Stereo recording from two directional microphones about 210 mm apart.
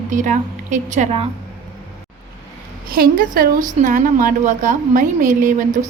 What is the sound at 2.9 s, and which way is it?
A woman's voice, 45° right (ahead or behind).